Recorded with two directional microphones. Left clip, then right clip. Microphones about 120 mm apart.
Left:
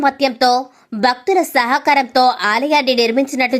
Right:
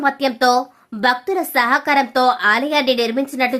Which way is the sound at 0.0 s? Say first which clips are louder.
Left 2 dB; 35° left (ahead or behind).